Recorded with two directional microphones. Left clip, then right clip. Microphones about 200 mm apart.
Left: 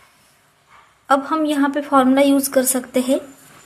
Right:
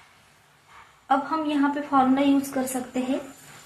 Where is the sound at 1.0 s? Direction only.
55° left (ahead or behind).